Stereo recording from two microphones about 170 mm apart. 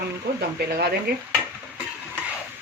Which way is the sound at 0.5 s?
70° right (ahead or behind).